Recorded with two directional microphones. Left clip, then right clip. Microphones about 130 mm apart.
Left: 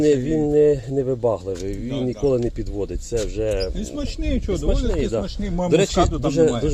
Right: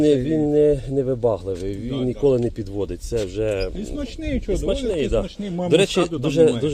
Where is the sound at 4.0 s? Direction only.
60° left (ahead or behind).